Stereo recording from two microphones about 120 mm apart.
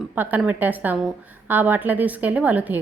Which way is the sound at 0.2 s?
15° right (ahead or behind).